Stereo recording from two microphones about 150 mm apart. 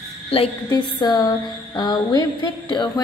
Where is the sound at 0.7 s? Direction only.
25° left (ahead or behind).